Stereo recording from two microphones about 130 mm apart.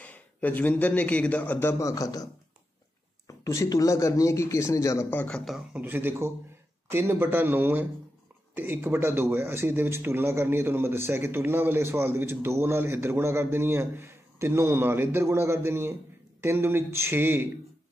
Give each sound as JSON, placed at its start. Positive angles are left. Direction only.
{"t": 0.0, "sound": "a man's voice", "side_deg": 10}
{"t": 3.3, "sound": "speech", "side_deg": 25}
{"t": 5.2, "sound": "a man's voice", "side_deg": 5}
{"t": 5.8, "sound": "speech", "side_deg": -15}